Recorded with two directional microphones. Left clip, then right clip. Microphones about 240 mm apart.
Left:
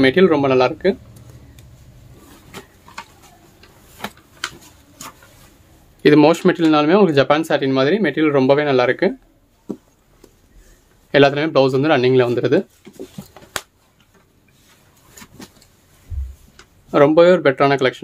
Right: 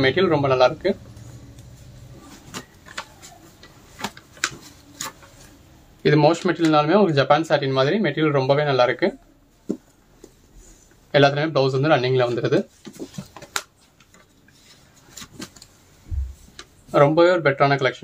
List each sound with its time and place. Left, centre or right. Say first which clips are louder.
0.0 s speech: left 5 dB; left
6.0 s speech: left 5 dB; left
11.1 s speech: left 4 dB; left
16.9 s speech: left 4 dB; left